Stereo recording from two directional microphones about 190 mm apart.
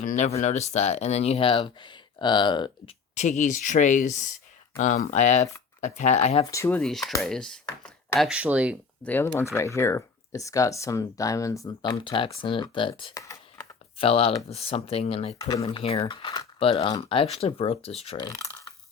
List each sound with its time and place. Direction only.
0.0 s speech: 40° left (ahead or behind); by 2.9 s 25° left (ahead or behind)
3.2 s speech: 40° left (ahead or behind)
6.4 s speech: 15° left (ahead or behind)
8.3 s speech: 5° right (ahead or behind)
9.0 s speech: 10° left (ahead or behind)
14.0 s speech: 30° left (ahead or behind)
15.4 s speech: 20° left (ahead or behind)
18.2 s a sound: 20° left (ahead or behind)